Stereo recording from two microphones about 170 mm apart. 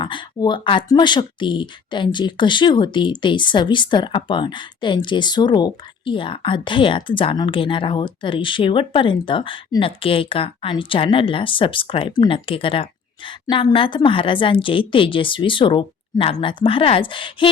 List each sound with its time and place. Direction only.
0.0 s speech: 30° left (ahead or behind)